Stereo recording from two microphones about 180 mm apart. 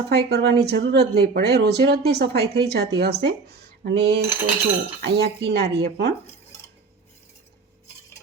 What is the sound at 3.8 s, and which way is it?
Cutlery, 65° right (ahead or behind).